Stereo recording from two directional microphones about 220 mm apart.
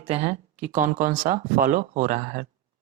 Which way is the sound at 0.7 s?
40° right (ahead or behind).